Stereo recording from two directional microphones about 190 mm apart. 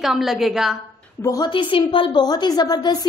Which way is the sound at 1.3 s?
20° left (ahead or behind).